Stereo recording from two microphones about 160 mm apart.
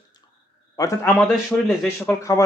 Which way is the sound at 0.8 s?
20° left (ahead or behind).